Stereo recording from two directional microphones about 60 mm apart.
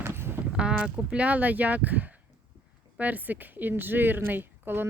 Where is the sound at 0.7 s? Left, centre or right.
Right.